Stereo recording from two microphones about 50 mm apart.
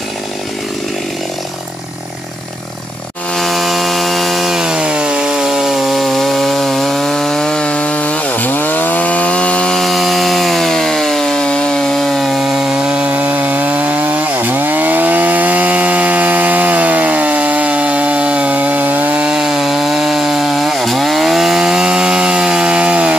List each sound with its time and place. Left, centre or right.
3.3 s chainsaw: centre
7.6 s chainsaw: left
9.8 s chainsaw: centre
12.7 s chainsaw: right
19.1 s chainsaw: centre
19.4 s chainsaw: centre; by 23.1 s right